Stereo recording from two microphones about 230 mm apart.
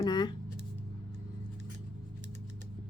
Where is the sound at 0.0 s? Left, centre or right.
Centre.